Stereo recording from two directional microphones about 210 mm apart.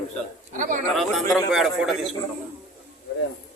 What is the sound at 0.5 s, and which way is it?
Speech, 35° right (ahead or behind).